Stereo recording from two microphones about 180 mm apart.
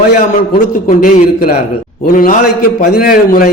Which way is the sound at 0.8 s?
50° left (ahead or behind).